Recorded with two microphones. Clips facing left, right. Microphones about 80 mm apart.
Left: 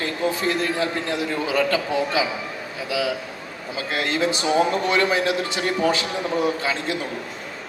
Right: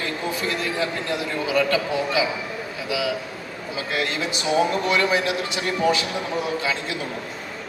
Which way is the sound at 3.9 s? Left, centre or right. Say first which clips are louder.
Left 4 dB; left.